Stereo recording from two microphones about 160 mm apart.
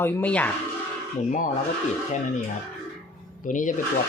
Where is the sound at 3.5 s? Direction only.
55° left (ahead or behind).